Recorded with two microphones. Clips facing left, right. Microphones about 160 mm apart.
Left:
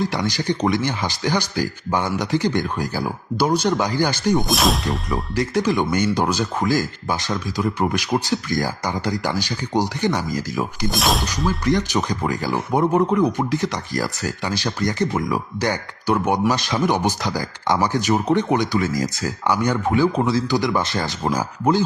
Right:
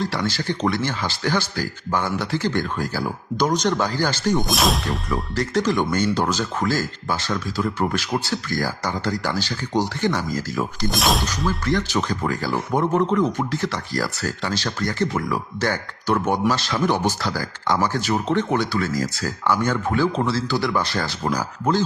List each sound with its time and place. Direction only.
0.0 s speech: 15° left (ahead or behind)
4.4 s speech: centre (ahead or behind)
5.3 s speech: 10° left (ahead or behind)
10.8 s speech: centre (ahead or behind)
11.6 s speech: 15° left (ahead or behind)